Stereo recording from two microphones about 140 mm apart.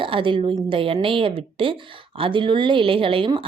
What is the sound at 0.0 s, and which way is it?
A woman's voice, 35° right (ahead or behind).